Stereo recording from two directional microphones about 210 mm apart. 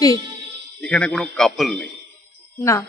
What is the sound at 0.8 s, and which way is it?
A man's voice, 5° left (ahead or behind).